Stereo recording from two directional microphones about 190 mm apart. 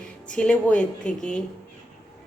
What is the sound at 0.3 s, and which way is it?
A woman's voice, 5° left (ahead or behind).